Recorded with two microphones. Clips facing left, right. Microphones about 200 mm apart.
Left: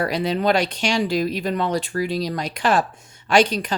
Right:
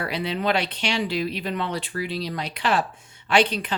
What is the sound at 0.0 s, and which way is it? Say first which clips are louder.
Speech: left 5 dB; 45° left (ahead or behind).